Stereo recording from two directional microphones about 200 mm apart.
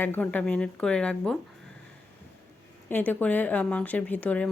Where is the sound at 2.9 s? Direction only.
10° left (ahead or behind).